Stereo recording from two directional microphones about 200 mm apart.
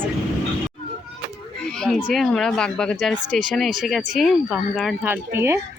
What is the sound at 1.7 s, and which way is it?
Speech, centre (ahead or behind).